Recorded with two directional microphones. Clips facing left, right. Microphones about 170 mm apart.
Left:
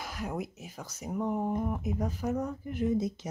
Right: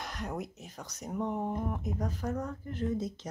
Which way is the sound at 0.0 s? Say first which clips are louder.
Left 2 dB; 5° left (ahead or behind).